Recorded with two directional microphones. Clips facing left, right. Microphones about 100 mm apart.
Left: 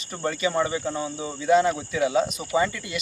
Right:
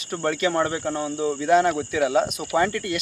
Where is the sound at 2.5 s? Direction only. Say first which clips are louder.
Right 2 dB; 65° right (ahead or behind).